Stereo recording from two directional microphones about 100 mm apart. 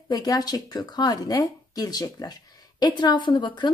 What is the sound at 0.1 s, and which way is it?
Speech, 40° left (ahead or behind).